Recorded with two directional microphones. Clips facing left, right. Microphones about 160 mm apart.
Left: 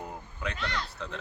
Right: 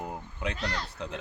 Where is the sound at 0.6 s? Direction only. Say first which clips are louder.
Left 2 dB; 40° right (ahead or behind).